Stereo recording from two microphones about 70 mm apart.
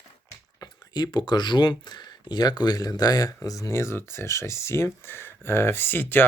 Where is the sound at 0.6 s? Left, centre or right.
Left.